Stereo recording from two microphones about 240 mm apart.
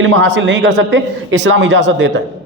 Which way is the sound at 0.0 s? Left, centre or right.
Right.